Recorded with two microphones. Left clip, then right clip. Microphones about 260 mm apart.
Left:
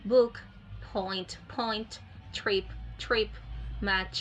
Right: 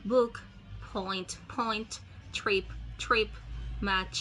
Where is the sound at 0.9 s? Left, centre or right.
Centre.